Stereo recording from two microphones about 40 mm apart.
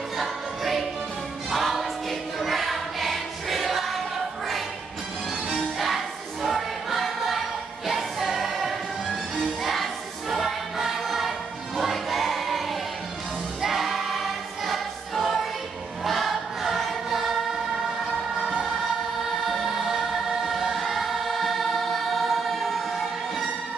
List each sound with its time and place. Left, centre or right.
0.2 s music: centre
1.5 s choir: centre
5.5 s music: centre
11.9 s choir: centre
19.5 s choir: centre